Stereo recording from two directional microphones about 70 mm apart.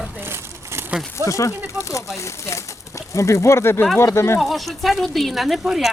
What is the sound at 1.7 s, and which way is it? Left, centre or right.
Speech, right.